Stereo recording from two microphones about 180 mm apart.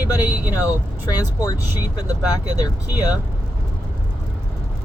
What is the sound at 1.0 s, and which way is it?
Speech, 20° left (ahead or behind).